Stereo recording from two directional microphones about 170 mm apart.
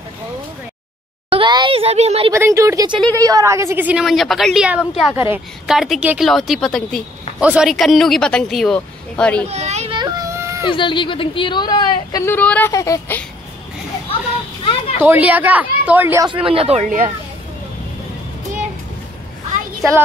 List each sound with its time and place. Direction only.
1.3 s a sound: 30° right (ahead or behind)
2.3 s a woman's voice: 15° right (ahead or behind)
5.1 s a woman's voice: 15° right (ahead or behind)
5.7 s speech: centre (ahead or behind)
9.5 s children playing: 40° right (ahead or behind)
9.9 s a sound: 20° right (ahead or behind)
10.6 s speech: 30° left (ahead or behind)
14.6 s a sound: 30° left (ahead or behind)
15.0 s a woman's voice: 10° right (ahead or behind)
16.4 s speech: 35° right (ahead or behind)